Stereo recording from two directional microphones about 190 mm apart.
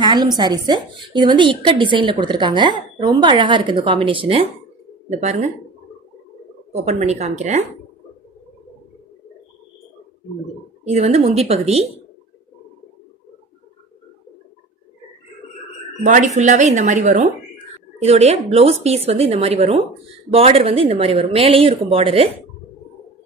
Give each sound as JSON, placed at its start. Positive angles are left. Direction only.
{"t": 0.0, "sound": "a woman's voice", "side_deg": -20}
{"t": 6.7, "sound": "a woman's voice", "side_deg": -35}
{"t": 10.9, "sound": "a woman's voice", "side_deg": -35}
{"t": 16.0, "sound": "a woman's voice", "side_deg": -40}